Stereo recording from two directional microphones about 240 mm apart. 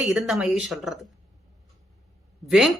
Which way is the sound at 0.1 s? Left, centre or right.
Centre.